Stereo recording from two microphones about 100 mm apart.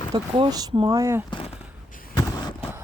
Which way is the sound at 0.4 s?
40° right (ahead or behind).